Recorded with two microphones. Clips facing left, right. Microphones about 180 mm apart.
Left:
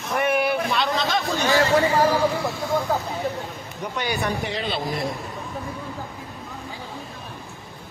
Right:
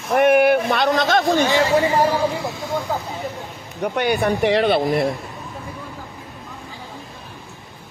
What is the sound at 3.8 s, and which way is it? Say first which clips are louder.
Speech: right 7 dB; 60° right (ahead or behind).